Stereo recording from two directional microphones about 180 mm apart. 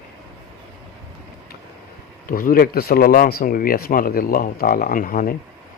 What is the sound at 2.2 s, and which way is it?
Speech, 55° left (ahead or behind).